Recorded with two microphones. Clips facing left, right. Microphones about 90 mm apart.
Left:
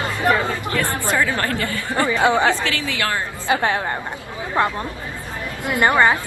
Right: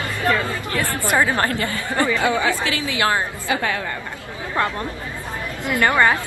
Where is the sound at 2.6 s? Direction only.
20° right (ahead or behind).